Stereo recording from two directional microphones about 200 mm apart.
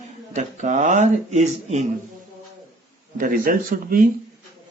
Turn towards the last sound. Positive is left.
turn(degrees=-45)  # may be behind; listen again after turning